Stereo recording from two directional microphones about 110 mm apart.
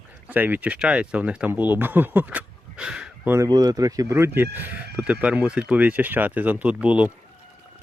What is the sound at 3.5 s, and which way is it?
Speech, 35° right (ahead or behind).